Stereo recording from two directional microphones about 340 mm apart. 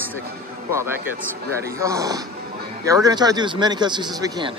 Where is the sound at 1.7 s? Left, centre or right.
Centre.